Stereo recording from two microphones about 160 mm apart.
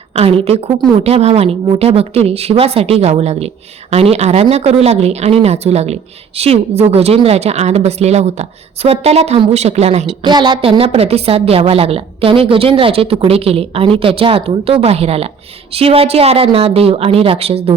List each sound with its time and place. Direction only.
0.1 s a woman's voice: 40° right (ahead or behind)
10.2 s speech: 30° right (ahead or behind)